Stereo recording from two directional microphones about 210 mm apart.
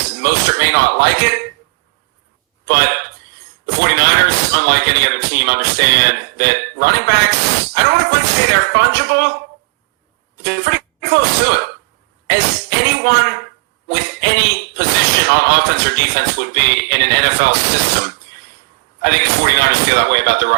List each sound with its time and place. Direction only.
0.1 s speech: 50° right (ahead or behind)
2.6 s speech: 50° right (ahead or behind)
10.4 s speech: 50° right (ahead or behind)
12.8 s speech: 50° right (ahead or behind)
18.9 s speech: 50° right (ahead or behind)